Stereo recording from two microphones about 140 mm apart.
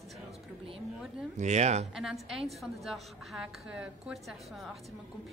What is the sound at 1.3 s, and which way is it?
Speech, 55° right (ahead or behind).